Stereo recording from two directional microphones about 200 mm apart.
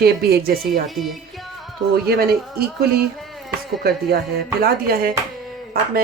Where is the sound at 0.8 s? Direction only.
Centre (ahead or behind).